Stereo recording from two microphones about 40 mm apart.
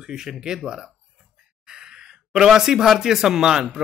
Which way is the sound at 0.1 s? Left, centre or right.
Centre.